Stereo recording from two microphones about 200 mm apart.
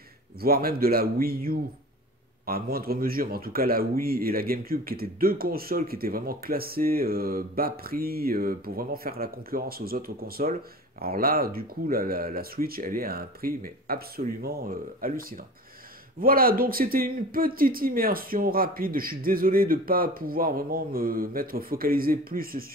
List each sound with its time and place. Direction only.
0.4 s a man's voice: 50° right (ahead or behind)